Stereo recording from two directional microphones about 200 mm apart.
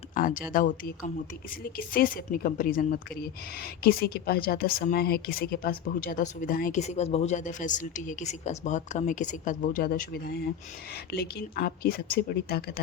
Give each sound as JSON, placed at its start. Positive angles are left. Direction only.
{"t": 0.1, "sound": "speech", "side_deg": 45}